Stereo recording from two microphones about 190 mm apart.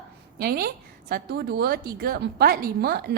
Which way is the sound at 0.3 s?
55° right (ahead or behind).